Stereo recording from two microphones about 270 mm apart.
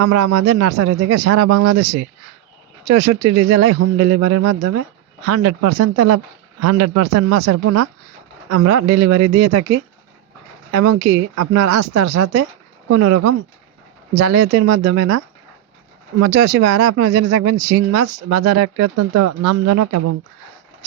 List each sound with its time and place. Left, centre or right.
0.0 s speech: right
16.2 s speech: right